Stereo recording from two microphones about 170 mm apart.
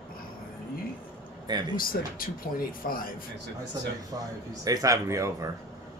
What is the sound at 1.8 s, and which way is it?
Speech, 55° left (ahead or behind).